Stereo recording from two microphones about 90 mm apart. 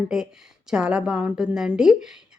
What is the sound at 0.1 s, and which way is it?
Speech, 5° right (ahead or behind).